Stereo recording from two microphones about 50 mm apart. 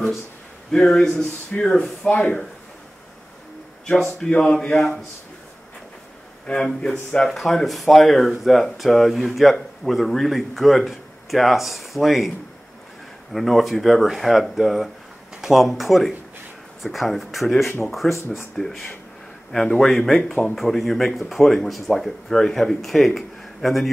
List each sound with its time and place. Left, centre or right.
0.7 s a man's voice: centre
1.5 s speech: left
3.8 s a man's voice: centre
6.4 s a man's voice: centre
7.2 s speech: centre
13.3 s speech: centre
18.0 s a man's voice: centre
18.6 s speech: centre